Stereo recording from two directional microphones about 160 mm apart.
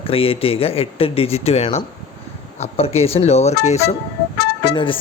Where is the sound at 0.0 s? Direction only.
35° left (ahead or behind).